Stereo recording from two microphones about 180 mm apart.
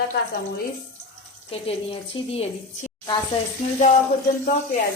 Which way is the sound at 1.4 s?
30° left (ahead or behind).